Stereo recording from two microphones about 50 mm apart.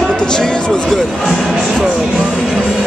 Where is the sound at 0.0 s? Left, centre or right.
Centre.